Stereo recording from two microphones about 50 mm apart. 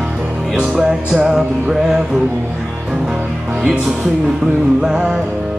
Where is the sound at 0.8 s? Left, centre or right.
Centre.